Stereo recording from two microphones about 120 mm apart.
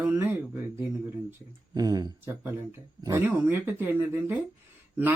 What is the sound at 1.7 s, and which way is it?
Speech, 35° right (ahead or behind).